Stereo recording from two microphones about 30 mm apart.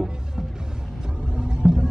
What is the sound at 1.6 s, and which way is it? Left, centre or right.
Music, right.